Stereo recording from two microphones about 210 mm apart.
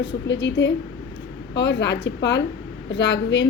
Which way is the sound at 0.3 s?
60° left (ahead or behind).